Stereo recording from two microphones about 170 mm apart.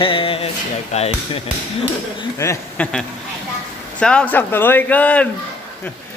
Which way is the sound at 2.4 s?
15° left (ahead or behind).